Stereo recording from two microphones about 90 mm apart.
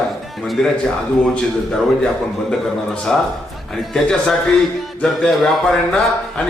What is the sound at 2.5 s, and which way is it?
A man's voice, 5° left (ahead or behind).